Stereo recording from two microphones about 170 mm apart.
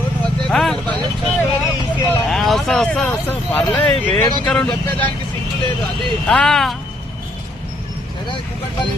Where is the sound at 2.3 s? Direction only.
Centre (ahead or behind).